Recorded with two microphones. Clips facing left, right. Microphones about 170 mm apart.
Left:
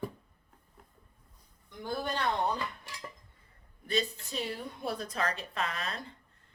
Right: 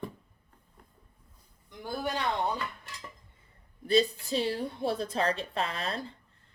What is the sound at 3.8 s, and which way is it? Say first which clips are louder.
A woman's voice: right 7 dB; 30° right (ahead or behind).